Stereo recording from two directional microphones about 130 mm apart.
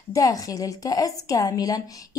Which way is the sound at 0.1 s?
25° left (ahead or behind).